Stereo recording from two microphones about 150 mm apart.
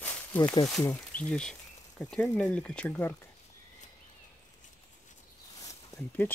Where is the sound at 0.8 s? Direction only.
10° left (ahead or behind).